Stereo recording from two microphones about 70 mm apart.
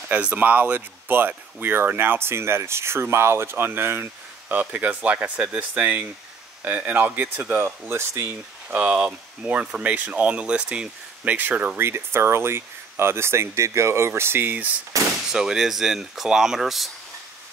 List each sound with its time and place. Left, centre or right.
0.1 s speech: right
7.9 s speech: right
8.6 s speech: centre
11.8 s speech: right
14.9 s gunshot: right
15.3 s speech: centre